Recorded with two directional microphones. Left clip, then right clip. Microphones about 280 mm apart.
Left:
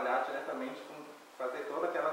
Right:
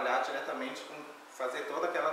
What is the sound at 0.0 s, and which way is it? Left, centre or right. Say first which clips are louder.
Speech: right 2 dB; centre.